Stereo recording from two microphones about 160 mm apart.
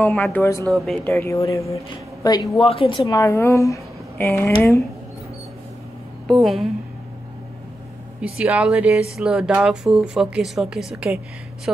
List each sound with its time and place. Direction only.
0.0 s a woman's voice: 10° left (ahead or behind)
0.7 s speech: centre (ahead or behind)
1.0 s speech: 15° left (ahead or behind)
2.6 s a woman's voice: 35° left (ahead or behind)
3.2 s a woman's voice: 15° left (ahead or behind)
6.2 s a woman's voice: centre (ahead or behind)
8.2 s a woman's voice: 5° right (ahead or behind)